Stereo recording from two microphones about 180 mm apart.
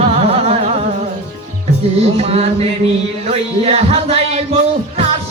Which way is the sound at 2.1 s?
35° right (ahead or behind).